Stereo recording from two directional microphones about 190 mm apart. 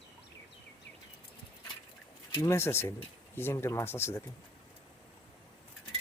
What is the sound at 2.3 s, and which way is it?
Speech, 15° left (ahead or behind).